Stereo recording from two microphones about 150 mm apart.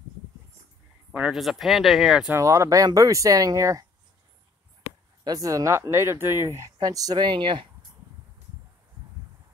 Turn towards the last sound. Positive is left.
turn(degrees=-30)  # may be behind; listen again after turning